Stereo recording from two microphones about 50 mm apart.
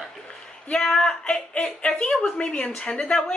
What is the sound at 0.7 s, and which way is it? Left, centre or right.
A man's voice, centre.